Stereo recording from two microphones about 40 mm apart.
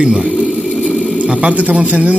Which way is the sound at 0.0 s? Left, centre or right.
Centre.